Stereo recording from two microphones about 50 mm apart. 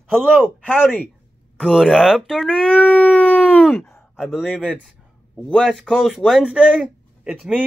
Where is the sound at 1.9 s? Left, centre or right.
Centre.